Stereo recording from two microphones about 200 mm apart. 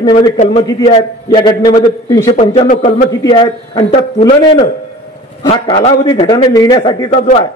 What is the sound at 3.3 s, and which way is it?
Speech, 30° left (ahead or behind).